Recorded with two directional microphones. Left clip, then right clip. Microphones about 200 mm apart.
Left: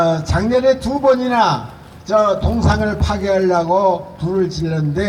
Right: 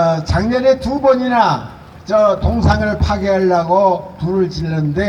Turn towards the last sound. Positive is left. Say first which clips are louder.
# right 1 dB
turn(degrees=15)  # may be behind; listen again after turning